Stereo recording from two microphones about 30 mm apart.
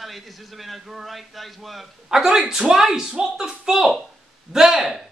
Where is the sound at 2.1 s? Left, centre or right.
Right.